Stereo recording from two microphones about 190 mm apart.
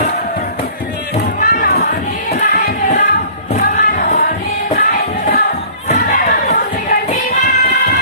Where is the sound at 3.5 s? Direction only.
40° left (ahead or behind).